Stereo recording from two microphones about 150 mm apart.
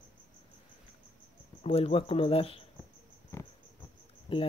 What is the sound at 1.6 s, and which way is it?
Speech, 40° left (ahead or behind).